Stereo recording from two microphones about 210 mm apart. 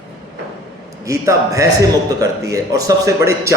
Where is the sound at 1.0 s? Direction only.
15° right (ahead or behind).